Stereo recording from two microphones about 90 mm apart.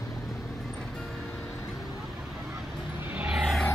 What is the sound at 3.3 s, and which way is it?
Vehicle, 5° right (ahead or behind).